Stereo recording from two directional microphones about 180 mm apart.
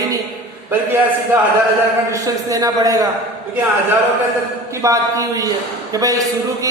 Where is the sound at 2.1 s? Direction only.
20° right (ahead or behind).